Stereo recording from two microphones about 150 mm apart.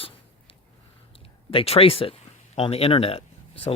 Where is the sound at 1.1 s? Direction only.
35° left (ahead or behind).